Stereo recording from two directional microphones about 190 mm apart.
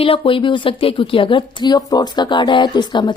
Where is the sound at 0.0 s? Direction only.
30° left (ahead or behind).